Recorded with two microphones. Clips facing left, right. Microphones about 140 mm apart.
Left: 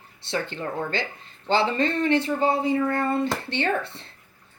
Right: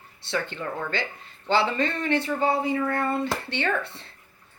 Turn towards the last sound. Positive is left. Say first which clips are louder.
# left 2 dB
turn(degrees=30)  # may be behind; listen again after turning